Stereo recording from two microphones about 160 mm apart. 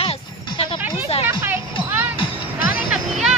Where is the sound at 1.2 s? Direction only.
15° right (ahead or behind).